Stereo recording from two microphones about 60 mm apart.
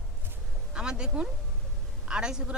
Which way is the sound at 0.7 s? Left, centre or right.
Centre.